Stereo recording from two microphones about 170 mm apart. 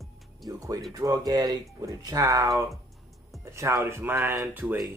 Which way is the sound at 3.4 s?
15° right (ahead or behind).